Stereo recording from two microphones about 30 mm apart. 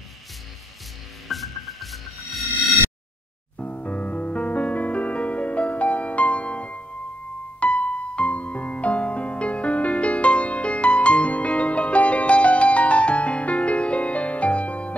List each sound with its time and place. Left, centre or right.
1.3 s rub: centre
3.8 s music: left